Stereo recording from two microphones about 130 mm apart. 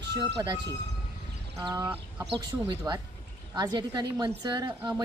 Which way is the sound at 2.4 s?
35° right (ahead or behind).